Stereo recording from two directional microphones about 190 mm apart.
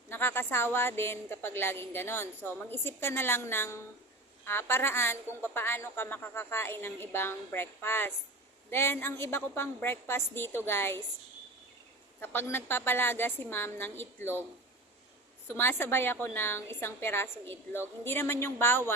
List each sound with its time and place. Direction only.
0.1 s a woman's voice: 10° left (ahead or behind)
12.2 s a woman's voice: 10° left (ahead or behind)
15.4 s a woman's voice: 10° left (ahead or behind)